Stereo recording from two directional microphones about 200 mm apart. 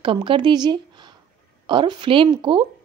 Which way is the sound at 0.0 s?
25° right (ahead or behind).